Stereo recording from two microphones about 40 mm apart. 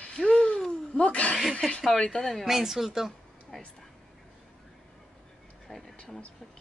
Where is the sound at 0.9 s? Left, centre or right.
Left.